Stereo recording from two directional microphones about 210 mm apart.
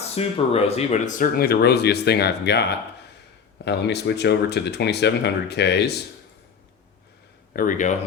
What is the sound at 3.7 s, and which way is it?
Speech, 55° left (ahead or behind).